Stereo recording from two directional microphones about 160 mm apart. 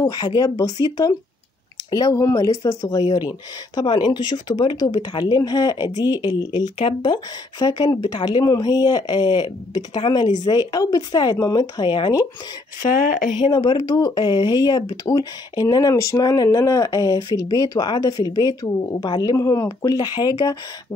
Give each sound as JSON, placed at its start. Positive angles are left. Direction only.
{"t": 0.0, "sound": "speech", "side_deg": 25}
{"t": 13.0, "sound": "speech", "side_deg": 55}
{"t": 13.5, "sound": "speech", "side_deg": 25}